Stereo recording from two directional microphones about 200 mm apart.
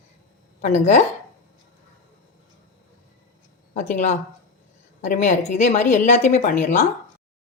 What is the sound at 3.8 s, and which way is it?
Speech, 35° left (ahead or behind).